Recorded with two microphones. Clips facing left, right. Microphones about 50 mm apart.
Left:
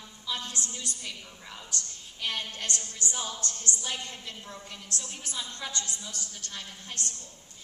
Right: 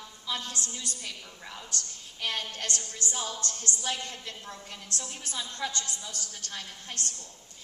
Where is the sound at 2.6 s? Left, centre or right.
Left.